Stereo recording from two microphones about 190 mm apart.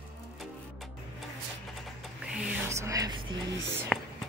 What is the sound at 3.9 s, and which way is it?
Whispering, centre (ahead or behind).